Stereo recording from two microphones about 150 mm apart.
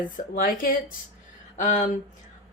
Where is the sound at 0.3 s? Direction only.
70° left (ahead or behind).